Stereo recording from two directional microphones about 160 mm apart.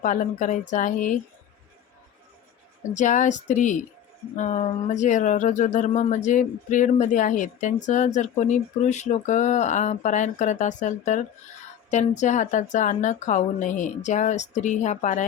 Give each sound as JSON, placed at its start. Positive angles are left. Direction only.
{"t": 0.0, "sound": "speech", "side_deg": 55}
{"t": 2.9, "sound": "speech", "side_deg": 50}